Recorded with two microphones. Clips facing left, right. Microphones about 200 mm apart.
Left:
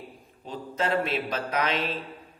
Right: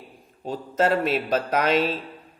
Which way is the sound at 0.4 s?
45° right (ahead or behind).